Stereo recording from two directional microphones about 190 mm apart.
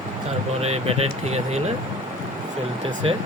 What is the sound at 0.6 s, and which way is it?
Speech, 35° right (ahead or behind).